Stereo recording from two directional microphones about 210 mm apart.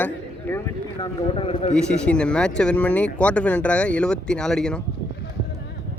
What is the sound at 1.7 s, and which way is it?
Speech, 5° left (ahead or behind).